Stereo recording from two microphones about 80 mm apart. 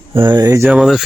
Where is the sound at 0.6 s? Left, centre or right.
Centre.